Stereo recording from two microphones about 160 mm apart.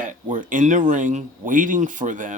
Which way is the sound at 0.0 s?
55° right (ahead or behind).